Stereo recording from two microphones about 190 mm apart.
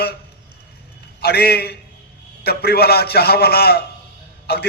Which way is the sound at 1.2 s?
55° left (ahead or behind).